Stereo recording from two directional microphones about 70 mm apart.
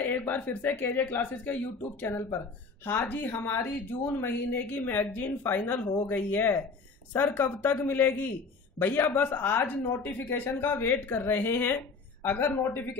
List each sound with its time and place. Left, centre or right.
0.3 s speech: left